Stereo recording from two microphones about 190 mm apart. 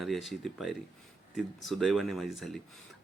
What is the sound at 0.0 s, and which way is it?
Speech, centre (ahead or behind).